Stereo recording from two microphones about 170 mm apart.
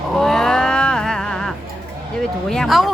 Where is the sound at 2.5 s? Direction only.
Centre (ahead or behind).